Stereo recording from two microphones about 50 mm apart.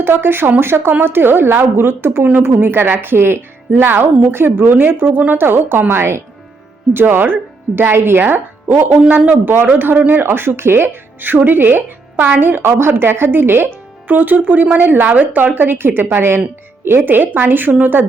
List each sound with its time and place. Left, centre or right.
0.0 s speech: right
5.9 s speech: right
6.9 s speech: right
8.2 s speech: right
9.5 s speech: right